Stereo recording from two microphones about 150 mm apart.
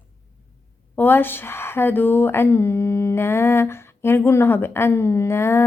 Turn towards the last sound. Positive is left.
turn(degrees=15)  # may be behind; listen again after turning